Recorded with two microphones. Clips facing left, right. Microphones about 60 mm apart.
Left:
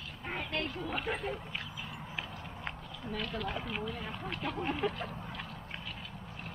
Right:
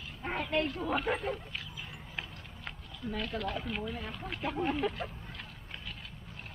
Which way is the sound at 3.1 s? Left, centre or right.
Centre.